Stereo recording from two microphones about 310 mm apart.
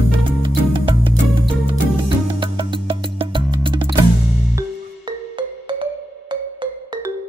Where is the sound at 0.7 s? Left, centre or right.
Centre.